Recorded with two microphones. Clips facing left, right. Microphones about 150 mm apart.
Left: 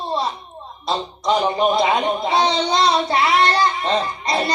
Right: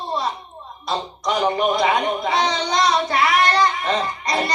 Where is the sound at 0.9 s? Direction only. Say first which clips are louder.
Left 3 dB; 30° left (ahead or behind).